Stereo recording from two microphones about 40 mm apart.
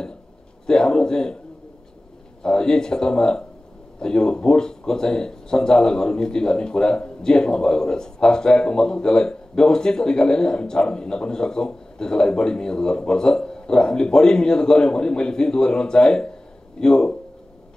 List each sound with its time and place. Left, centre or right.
0.7 s speech: centre
2.4 s speech: centre